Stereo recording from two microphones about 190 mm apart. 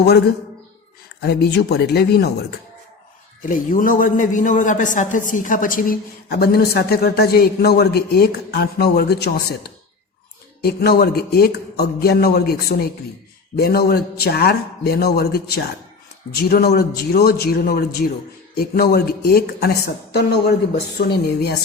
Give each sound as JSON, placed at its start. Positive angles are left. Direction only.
{"t": 1.2, "sound": "a man's voice", "side_deg": 60}
{"t": 3.5, "sound": "a man's voice", "side_deg": 45}
{"t": 21.0, "sound": "a man's voice", "side_deg": 55}